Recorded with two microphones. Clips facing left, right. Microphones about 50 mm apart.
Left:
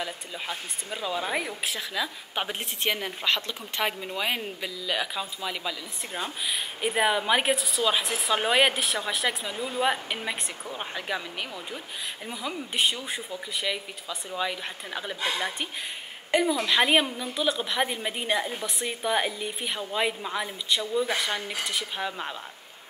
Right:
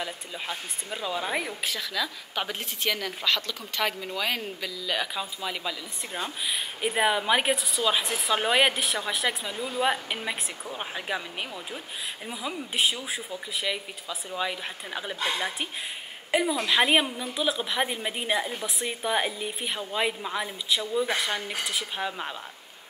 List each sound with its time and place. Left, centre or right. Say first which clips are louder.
0.0 s speech: even; centre
1.7 s speech: even; centre
3.8 s speech: even; centre
4.8 s speech: even; centre